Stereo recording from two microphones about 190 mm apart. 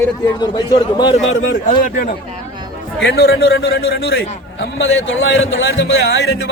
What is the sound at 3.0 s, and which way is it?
A man's voice, 60° left (ahead or behind).